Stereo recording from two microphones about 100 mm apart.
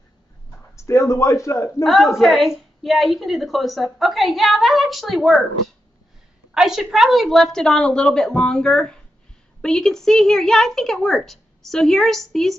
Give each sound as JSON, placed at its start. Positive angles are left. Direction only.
{"t": 0.7, "sound": "a man's voice", "side_deg": 30}
{"t": 1.8, "sound": "a woman's voice", "side_deg": 0}
{"t": 6.5, "sound": "a woman's voice", "side_deg": -5}